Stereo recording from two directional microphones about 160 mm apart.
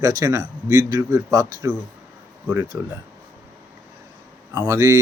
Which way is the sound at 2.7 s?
15° right (ahead or behind).